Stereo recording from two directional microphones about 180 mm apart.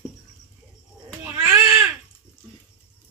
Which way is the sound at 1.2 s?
10° right (ahead or behind).